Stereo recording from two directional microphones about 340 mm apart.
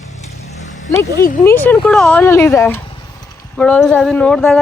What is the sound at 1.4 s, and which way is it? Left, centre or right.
Speech, centre.